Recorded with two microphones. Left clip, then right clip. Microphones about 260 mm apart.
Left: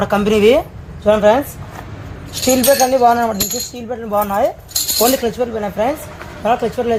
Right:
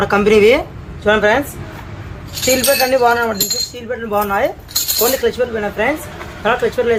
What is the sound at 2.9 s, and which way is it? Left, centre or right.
Speech, left.